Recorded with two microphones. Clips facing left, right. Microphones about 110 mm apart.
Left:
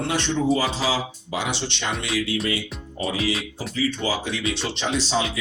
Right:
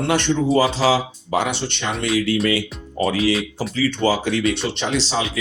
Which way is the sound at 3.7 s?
70° right (ahead or behind).